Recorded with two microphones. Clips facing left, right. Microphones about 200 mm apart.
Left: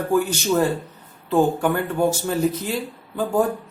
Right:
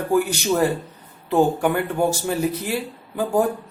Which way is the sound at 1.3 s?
10° right (ahead or behind).